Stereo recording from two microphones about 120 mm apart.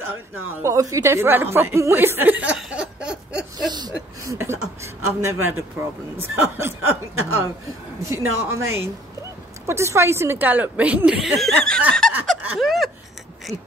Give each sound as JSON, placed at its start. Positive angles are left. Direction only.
{"t": 0.6, "sound": "a woman's voice", "side_deg": -25}
{"t": 3.5, "sound": "speech", "side_deg": -35}
{"t": 4.2, "sound": "a woman's voice", "side_deg": -25}
{"t": 12.0, "sound": "a sound", "side_deg": 5}
{"t": 12.5, "sound": "gasp", "side_deg": 0}